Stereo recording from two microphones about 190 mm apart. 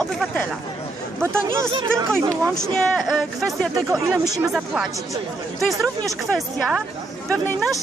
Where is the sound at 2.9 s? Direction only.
Centre (ahead or behind).